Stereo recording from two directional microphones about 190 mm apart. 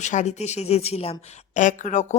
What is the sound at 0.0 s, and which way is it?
Speech, 40° left (ahead or behind).